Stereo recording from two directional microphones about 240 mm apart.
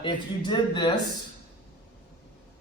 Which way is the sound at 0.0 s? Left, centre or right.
Centre.